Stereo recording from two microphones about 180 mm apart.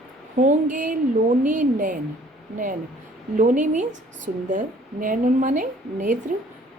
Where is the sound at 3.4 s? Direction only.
45° right (ahead or behind).